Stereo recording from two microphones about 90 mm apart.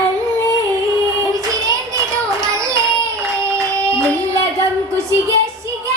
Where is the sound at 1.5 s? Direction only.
40° right (ahead or behind).